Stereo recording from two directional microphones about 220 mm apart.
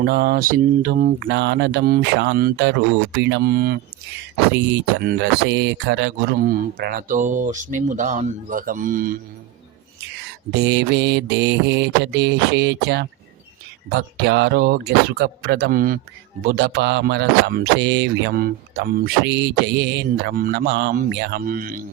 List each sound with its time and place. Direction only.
0.0 s speech: 45° right (ahead or behind)
1.3 s mantra: 55° right (ahead or behind)
4.5 s speech: 50° right (ahead or behind)
10.5 s mantra: 50° right (ahead or behind)
21.0 s speech: 50° right (ahead or behind)